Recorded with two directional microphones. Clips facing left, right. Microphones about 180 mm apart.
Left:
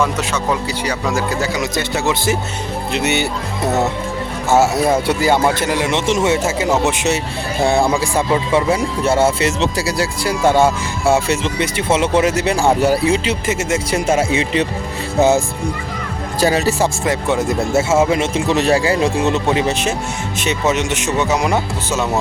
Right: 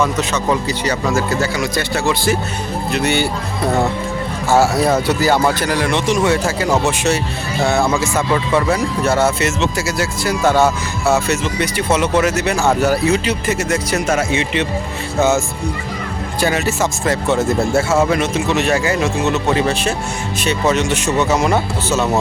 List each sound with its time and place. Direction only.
0.9 s speech: 10° left (ahead or behind)
4.4 s speech: 20° left (ahead or behind)
7.6 s speech: 30° left (ahead or behind)
17.0 s speech: 15° left (ahead or behind)
18.1 s speech: 30° left (ahead or behind)
19.5 s speech: 20° left (ahead or behind)